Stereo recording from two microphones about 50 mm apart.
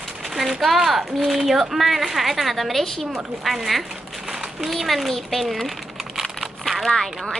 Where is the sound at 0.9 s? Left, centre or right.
Centre.